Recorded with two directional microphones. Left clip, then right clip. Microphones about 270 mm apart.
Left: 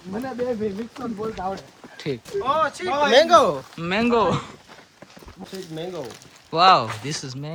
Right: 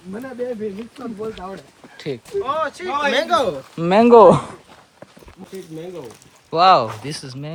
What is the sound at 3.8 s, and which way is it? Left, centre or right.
Speech, centre.